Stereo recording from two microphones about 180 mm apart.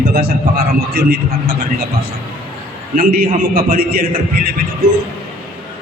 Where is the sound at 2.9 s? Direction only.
55° right (ahead or behind).